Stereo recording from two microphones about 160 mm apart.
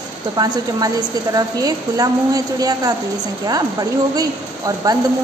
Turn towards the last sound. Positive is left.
turn(degrees=-25)  # may be behind; listen again after turning